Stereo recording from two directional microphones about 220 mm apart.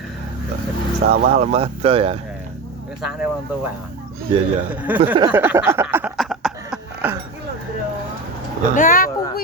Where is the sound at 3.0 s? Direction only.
5° right (ahead or behind).